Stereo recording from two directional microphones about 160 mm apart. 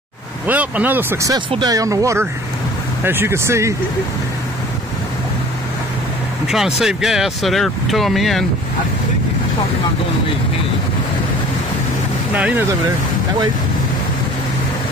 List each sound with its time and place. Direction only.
0.5 s speech: 10° right (ahead or behind)
6.4 s speech: centre (ahead or behind)
12.4 s speech: 10° right (ahead or behind)